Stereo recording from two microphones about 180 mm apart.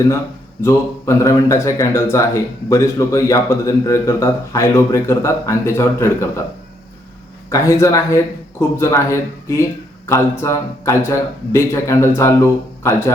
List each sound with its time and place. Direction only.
0.6 s speech: 15° left (ahead or behind)
7.5 s speech: 15° left (ahead or behind)